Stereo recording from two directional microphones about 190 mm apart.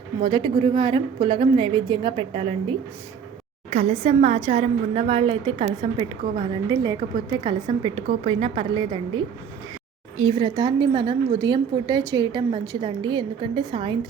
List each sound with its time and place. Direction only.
0.2 s a woman's voice: 25° right (ahead or behind)
3.7 s a woman's voice: 35° right (ahead or behind)